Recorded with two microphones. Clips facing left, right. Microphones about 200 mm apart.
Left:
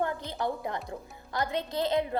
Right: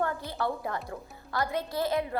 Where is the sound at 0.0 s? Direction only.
20° left (ahead or behind).